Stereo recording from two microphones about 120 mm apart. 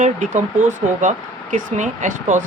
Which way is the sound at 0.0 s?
90° right.